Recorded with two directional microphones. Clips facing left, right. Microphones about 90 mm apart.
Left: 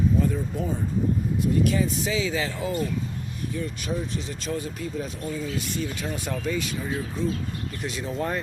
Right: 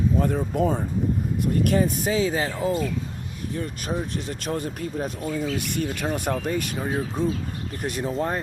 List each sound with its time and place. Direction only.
0.2 s speech: 60° right (ahead or behind)
8.0 s speech: 35° right (ahead or behind)